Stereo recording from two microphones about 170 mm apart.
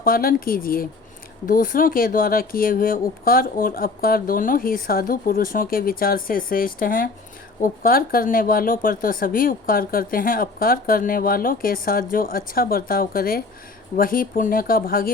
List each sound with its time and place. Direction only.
0.0 s speech: 60° left (ahead or behind)